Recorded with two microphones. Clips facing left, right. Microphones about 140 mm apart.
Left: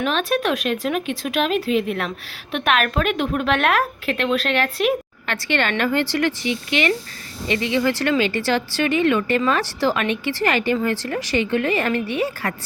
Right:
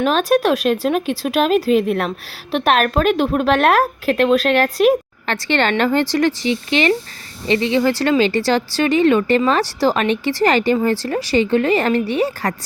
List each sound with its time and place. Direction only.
0.0 s speech: 40° right (ahead or behind)
11.1 s speech: 30° right (ahead or behind)